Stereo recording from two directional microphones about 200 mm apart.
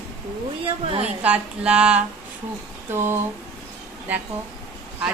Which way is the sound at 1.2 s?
5° right (ahead or behind).